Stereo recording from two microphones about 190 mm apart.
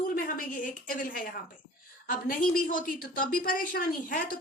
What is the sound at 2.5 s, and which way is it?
A woman's voice, 45° left (ahead or behind).